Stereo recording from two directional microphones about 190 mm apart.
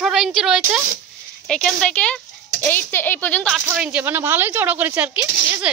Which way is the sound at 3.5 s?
5° right (ahead or behind).